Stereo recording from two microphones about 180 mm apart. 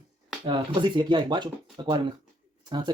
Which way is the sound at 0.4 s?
25° right (ahead or behind).